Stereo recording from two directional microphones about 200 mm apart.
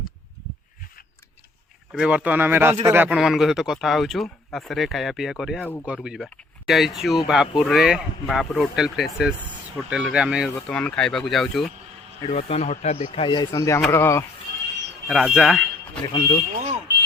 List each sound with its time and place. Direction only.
1.9 s speech: 5° right (ahead or behind)
5.8 s speech: 5° right (ahead or behind)
12.3 s speech: 30° left (ahead or behind); by 14.3 s 15° left (ahead or behind)
15.0 s speech: centre (ahead or behind)
16.0 s speech: 20° left (ahead or behind)